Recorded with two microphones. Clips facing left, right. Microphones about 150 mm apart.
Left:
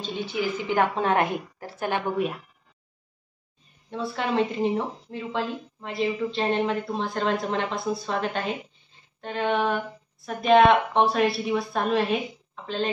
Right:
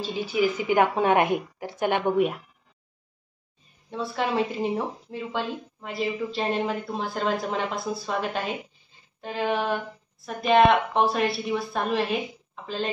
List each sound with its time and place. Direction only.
0.0 s a woman's voice: 5° right (ahead or behind)
3.9 s a woman's voice: centre (ahead or behind)